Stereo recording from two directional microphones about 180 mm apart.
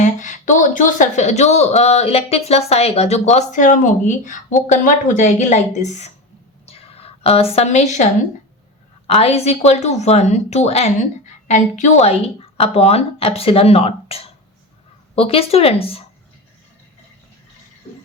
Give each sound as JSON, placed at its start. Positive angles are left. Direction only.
{"t": 0.0, "sound": "speech", "side_deg": 45}
{"t": 6.7, "sound": "a sound", "side_deg": 35}
{"t": 9.0, "sound": "speech", "side_deg": 35}